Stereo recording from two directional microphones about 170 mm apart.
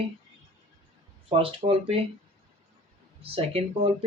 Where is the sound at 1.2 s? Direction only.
35° right (ahead or behind).